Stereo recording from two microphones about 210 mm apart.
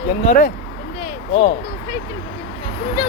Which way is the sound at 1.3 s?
30° left (ahead or behind).